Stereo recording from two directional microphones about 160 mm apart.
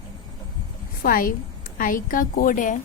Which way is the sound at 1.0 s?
60° left (ahead or behind).